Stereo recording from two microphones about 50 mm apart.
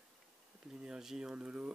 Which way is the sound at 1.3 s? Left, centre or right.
Right.